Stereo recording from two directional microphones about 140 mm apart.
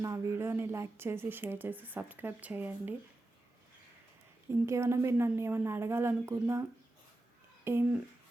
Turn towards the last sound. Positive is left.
turn(degrees=-20)  # may be behind; listen again after turning